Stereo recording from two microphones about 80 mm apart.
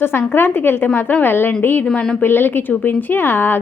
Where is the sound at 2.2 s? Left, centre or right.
Left.